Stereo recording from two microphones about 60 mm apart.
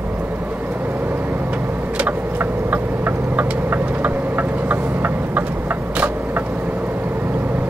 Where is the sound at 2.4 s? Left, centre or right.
Right.